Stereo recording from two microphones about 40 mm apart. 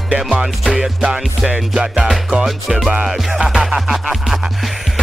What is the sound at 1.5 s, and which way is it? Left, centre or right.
Music, right.